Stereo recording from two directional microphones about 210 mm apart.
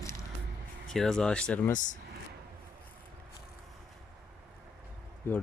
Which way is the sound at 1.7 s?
35° left (ahead or behind).